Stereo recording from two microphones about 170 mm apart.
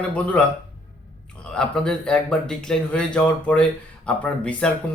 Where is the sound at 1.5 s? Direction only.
5° left (ahead or behind).